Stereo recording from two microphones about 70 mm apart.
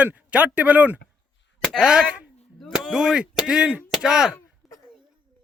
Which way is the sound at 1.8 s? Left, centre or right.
Centre.